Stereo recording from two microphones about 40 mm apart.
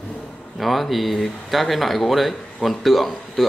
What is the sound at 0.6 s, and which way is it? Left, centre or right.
Speech, centre.